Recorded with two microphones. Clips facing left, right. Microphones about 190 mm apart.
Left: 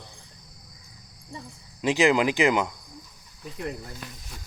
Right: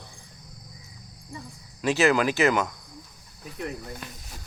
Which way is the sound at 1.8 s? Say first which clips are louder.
Left 1 dB; 15° left (ahead or behind).